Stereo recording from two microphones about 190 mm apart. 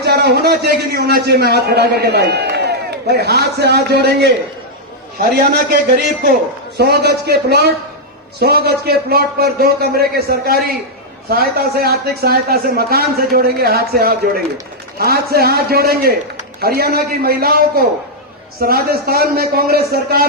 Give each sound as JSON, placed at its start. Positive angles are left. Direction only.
{"t": 0.0, "sound": "a man's voice", "side_deg": -60}
{"t": 6.7, "sound": "a man's voice", "side_deg": -60}